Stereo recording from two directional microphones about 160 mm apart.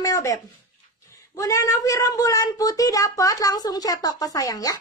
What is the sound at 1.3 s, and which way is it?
Speech, 20° left (ahead or behind).